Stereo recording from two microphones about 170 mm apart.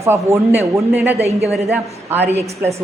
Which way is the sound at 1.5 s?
Centre (ahead or behind).